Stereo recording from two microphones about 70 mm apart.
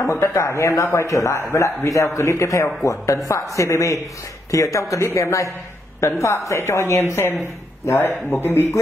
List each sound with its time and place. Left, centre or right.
0.0 s speech: left